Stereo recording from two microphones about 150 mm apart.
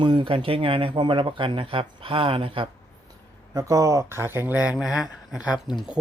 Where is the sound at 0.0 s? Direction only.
35° right (ahead or behind).